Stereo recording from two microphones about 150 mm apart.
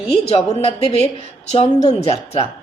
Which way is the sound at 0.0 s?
45° left (ahead or behind).